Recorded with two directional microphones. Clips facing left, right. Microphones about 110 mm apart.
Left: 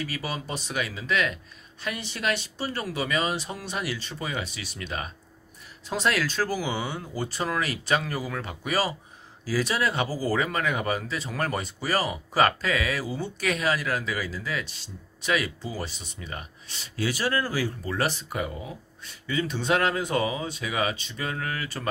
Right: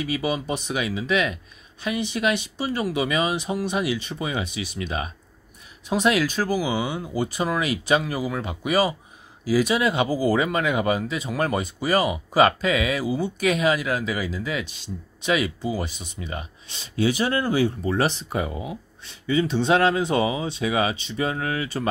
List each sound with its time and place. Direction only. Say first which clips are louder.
0.0 s speech: right 7 dB; 15° right (ahead or behind)